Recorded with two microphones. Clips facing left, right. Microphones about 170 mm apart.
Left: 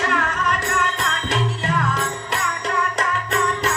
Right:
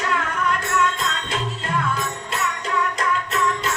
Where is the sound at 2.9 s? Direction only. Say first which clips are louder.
Left 1 dB; 70° left (ahead or behind).